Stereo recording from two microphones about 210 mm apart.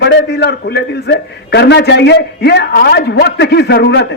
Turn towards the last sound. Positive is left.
turn(degrees=55)  # may be behind; listen again after turning